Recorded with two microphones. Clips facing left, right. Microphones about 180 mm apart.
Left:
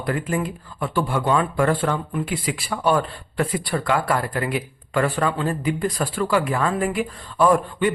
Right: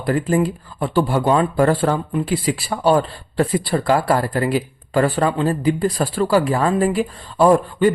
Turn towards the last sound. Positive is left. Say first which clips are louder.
# right 4 dB
turn(degrees=-35)  # may be behind; listen again after turning